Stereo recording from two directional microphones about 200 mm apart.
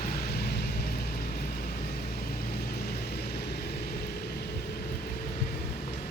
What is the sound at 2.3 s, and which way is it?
Vehicle, 50° left (ahead or behind).